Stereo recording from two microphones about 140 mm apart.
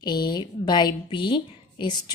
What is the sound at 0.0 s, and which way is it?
A woman's voice, 30° left (ahead or behind).